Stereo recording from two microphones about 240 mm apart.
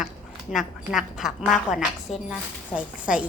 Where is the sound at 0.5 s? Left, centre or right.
Centre.